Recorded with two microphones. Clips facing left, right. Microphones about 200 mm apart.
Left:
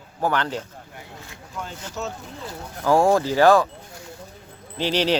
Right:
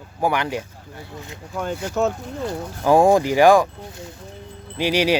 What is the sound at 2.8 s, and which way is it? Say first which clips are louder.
Speech: right 3 dB; 15° right (ahead or behind).